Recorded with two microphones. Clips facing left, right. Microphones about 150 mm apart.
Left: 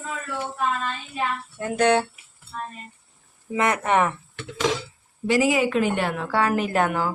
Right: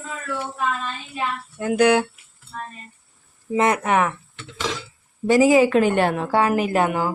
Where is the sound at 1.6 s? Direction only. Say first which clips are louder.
Right 3 dB; 5° right (ahead or behind).